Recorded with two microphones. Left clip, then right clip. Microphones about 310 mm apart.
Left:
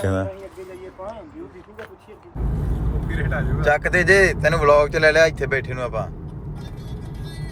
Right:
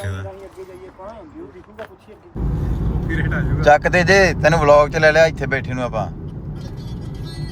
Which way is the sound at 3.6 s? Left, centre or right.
Centre.